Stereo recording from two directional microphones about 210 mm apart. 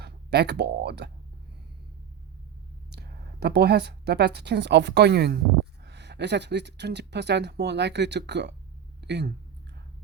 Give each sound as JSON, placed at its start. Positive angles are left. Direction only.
{"t": 0.0, "sound": "speech", "side_deg": -50}
{"t": 2.9, "sound": "a woman's voice", "side_deg": -50}
{"t": 9.0, "sound": "a sound", "side_deg": -50}